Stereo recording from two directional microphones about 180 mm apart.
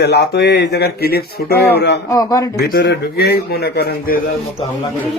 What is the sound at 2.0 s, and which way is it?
Speech, 20° left (ahead or behind).